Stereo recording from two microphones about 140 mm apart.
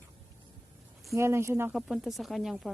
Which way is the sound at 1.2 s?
20° right (ahead or behind).